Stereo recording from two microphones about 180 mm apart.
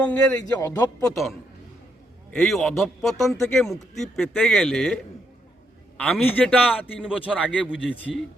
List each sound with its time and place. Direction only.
0.0 s speech: 10° left (ahead or behind)
1.1 s speech: centre (ahead or behind)
6.0 s speech: 5° left (ahead or behind)